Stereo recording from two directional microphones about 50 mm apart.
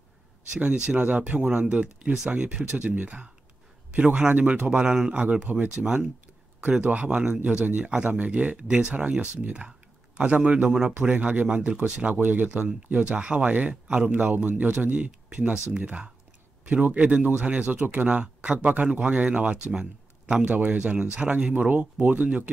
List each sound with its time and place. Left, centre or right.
0.5 s speech: right
5.7 s speech: centre
9.5 s computer keyboard: centre
10.2 s speech: right
11.0 s speech: right
16.6 s speech: right
17.7 s speech: right
18.0 s speech: right